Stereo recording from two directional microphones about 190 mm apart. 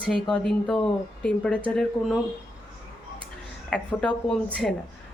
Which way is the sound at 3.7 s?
5° left (ahead or behind).